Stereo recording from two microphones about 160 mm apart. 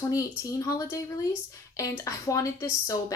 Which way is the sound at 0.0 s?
20° left (ahead or behind).